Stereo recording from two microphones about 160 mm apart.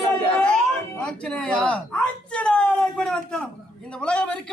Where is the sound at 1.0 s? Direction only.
5° left (ahead or behind).